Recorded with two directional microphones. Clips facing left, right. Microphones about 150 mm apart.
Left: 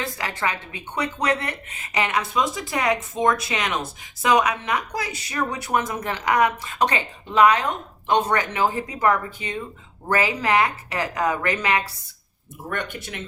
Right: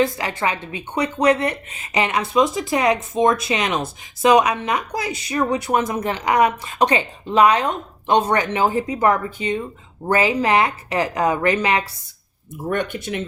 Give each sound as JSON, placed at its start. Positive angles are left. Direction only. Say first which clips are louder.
{"t": 0.2, "sound": "speech", "louder": "right 4 dB", "side_deg": -20}